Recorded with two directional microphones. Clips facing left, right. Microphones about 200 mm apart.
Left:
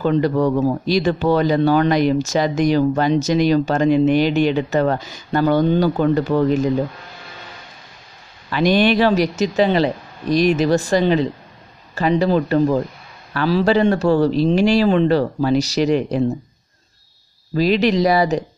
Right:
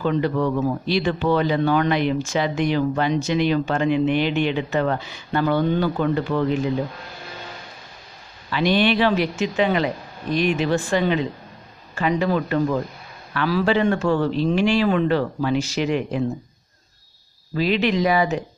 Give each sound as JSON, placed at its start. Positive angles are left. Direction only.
{"t": 0.0, "sound": "speech", "side_deg": 40}
{"t": 8.5, "sound": "speech", "side_deg": 45}
{"t": 17.6, "sound": "speech", "side_deg": 40}